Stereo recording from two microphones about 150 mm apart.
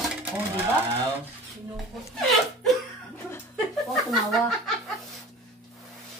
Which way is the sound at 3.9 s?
Centre (ahead or behind).